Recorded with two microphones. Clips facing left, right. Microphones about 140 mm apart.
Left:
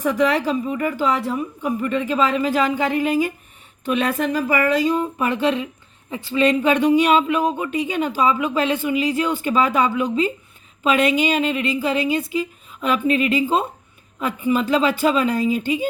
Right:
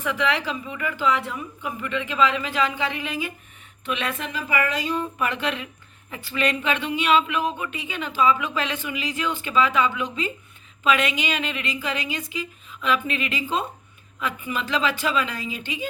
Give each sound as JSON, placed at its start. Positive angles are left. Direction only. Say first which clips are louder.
{"t": 0.0, "sound": "speech", "louder": "left 6 dB", "side_deg": 40}